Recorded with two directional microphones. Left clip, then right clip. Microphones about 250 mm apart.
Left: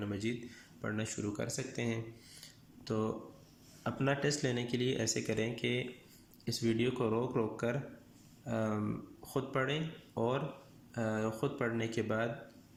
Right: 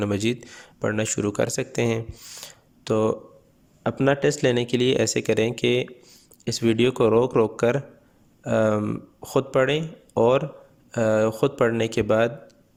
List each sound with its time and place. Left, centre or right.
0.0 s speech: right